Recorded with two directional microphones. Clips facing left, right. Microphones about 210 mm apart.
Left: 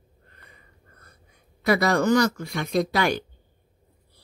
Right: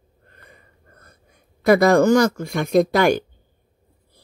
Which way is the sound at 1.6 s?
50° right (ahead or behind).